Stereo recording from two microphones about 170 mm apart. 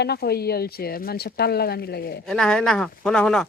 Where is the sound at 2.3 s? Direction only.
5° left (ahead or behind).